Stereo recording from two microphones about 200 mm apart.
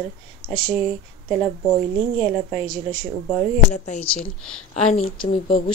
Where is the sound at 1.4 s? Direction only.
5° left (ahead or behind).